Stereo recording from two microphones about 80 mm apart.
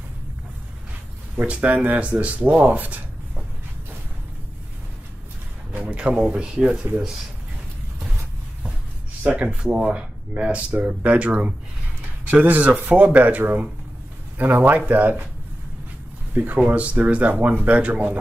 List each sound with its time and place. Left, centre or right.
1.3 s speech: centre
5.7 s speech: centre
9.2 s speech: centre
16.3 s speech: right